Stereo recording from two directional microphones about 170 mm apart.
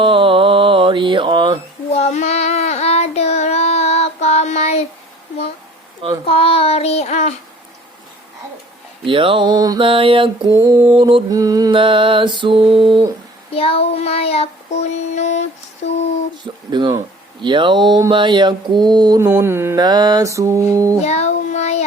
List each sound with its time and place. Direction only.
0.0 s mantra: 30° right (ahead or behind)
1.9 s child singing: 40° left (ahead or behind)
6.2 s child singing: 35° left (ahead or behind)
9.0 s speech: 30° right (ahead or behind)
10.6 s mantra: 20° right (ahead or behind)
13.5 s child singing: 35° left (ahead or behind)
16.4 s mantra: 25° right (ahead or behind)
21.0 s child singing: 40° left (ahead or behind)